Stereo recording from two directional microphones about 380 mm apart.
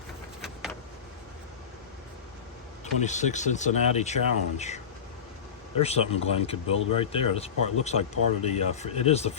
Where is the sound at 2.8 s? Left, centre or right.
Centre.